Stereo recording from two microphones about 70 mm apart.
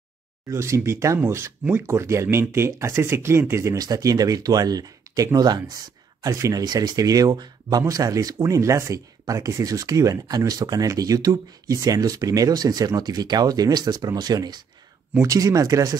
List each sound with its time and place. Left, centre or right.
0.5 s speech: right
3.7 s speech: right
6.3 s speech: right
6.6 s speech: right
15.2 s speech: right